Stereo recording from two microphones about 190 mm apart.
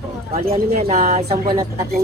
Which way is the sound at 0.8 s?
35° right (ahead or behind).